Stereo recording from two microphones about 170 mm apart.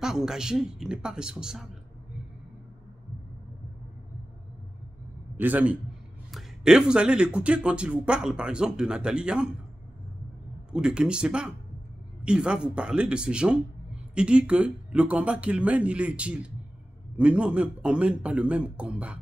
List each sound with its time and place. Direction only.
0.0 s speech: 5° right (ahead or behind)
5.4 s speech: 10° right (ahead or behind)
10.7 s speech: 5° right (ahead or behind)